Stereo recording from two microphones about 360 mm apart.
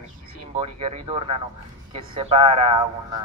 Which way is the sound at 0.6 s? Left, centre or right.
Centre.